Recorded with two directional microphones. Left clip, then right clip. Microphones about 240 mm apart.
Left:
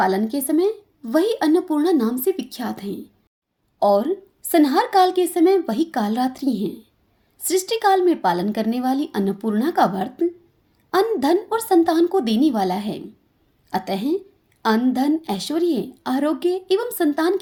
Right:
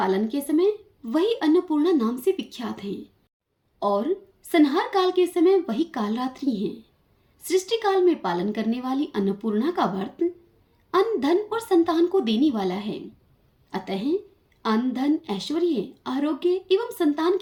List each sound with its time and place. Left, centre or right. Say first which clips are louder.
0.0 s a woman's voice: left 4 dB; left